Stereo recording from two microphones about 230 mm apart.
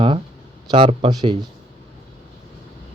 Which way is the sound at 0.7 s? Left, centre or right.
Right.